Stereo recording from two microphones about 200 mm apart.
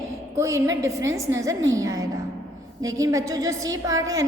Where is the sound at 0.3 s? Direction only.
15° right (ahead or behind).